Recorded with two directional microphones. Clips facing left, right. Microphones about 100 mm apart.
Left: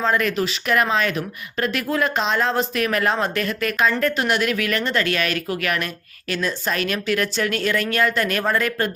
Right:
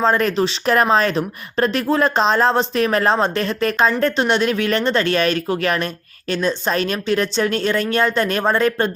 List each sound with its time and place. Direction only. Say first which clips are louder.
0.0 s speech: right 4 dB; 35° right (ahead or behind)